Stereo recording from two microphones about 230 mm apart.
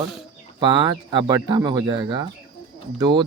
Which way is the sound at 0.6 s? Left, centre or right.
Centre.